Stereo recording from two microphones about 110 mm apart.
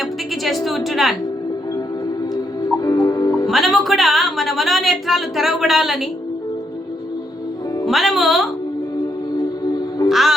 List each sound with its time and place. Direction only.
0.4 s speech: centre (ahead or behind)
2.8 s music: 35° left (ahead or behind)
3.4 s speech: centre (ahead or behind)
7.9 s speech: centre (ahead or behind)
9.6 s music: 35° left (ahead or behind)
10.1 s music: centre (ahead or behind)